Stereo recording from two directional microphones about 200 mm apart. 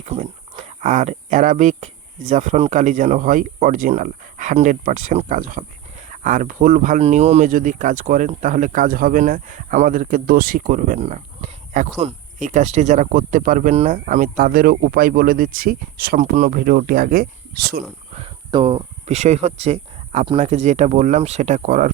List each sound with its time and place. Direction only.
0.0 s speech: 35° right (ahead or behind)
18.1 s speech: 25° right (ahead or behind)